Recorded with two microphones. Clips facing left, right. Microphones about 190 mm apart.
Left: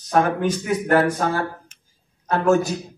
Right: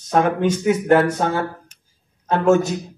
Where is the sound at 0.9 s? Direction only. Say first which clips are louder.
Right 1 dB; 25° right (ahead or behind).